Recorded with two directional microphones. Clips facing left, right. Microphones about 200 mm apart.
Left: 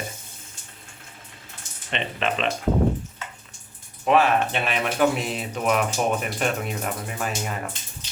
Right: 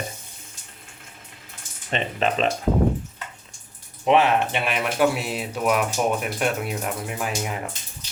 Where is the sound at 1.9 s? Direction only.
40° right (ahead or behind).